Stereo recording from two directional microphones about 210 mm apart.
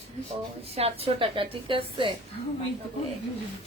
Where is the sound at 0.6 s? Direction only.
30° right (ahead or behind).